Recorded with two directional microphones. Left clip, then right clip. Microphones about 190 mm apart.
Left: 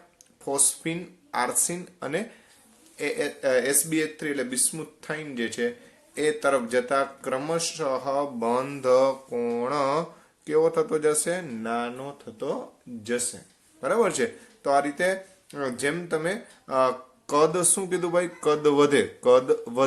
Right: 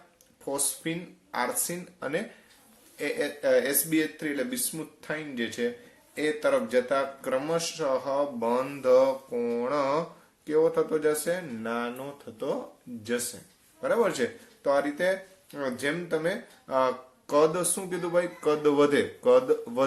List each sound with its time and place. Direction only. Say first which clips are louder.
0.4 s speech: left 4 dB; 35° left (ahead or behind)